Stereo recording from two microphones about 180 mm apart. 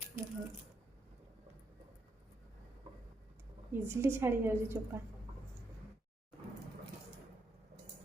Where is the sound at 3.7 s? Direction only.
15° right (ahead or behind).